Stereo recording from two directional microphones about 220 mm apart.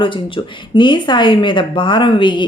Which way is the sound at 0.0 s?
20° left (ahead or behind).